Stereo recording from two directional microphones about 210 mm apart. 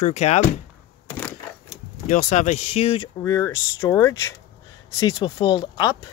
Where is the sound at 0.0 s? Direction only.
35° left (ahead or behind).